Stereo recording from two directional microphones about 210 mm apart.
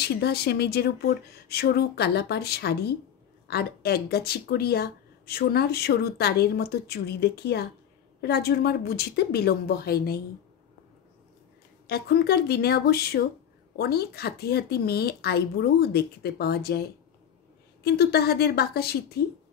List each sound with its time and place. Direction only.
0.0 s speech: 50° left (ahead or behind)
11.9 s speech: 50° left (ahead or behind)